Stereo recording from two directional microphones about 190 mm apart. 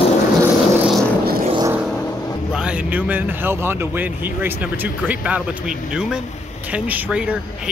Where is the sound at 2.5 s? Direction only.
5° right (ahead or behind).